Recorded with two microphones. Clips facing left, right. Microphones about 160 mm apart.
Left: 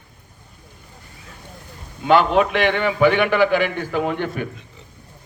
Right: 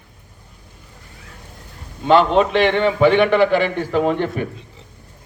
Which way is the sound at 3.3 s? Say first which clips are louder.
Right 2 dB; centre (ahead or behind).